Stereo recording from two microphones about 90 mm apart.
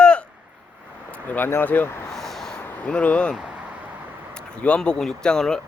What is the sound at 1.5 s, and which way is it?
Speech, 25° left (ahead or behind).